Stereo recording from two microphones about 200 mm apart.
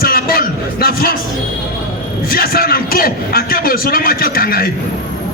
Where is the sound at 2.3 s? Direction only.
45° left (ahead or behind).